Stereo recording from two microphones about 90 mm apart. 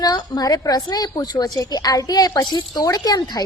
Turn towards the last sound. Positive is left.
turn(degrees=45)  # may be behind; listen again after turning